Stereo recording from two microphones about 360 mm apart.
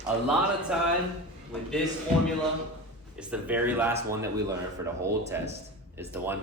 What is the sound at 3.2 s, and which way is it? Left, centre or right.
A man's voice, centre.